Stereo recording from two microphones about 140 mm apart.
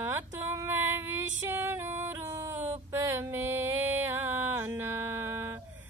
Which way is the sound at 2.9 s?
15° right (ahead or behind).